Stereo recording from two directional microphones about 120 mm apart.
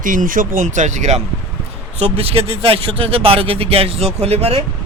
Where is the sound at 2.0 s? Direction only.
55° right (ahead or behind).